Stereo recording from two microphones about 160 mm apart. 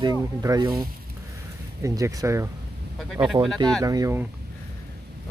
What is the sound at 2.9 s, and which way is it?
Speech, centre (ahead or behind).